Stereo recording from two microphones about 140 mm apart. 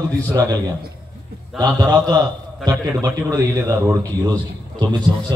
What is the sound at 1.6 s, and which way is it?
A man's voice, 30° right (ahead or behind).